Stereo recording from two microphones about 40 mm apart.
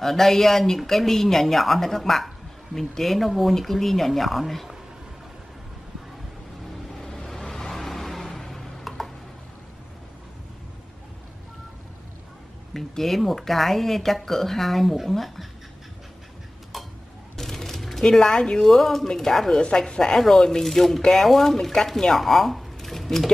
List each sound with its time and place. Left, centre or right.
0.0 s speech: centre
6.9 s vehicle: centre
12.7 s speech: centre
16.7 s tick-tock: centre
17.4 s a sound: centre
18.0 s speech: centre
19.5 s speech: centre